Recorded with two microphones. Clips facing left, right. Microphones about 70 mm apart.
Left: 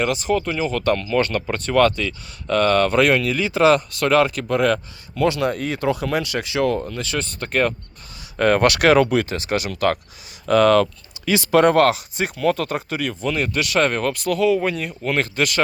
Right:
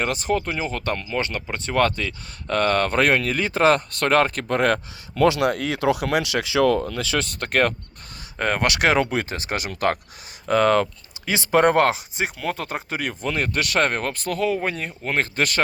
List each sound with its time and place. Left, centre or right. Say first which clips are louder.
0.0 s speech: left 3 dB; right
5.1 s speech: right 1 dB; right
8.4 s speech: left 5 dB; centre; by 10.0 s right
10.5 s speech: left 3 dB; right
13.0 s speech: left 1 dB; right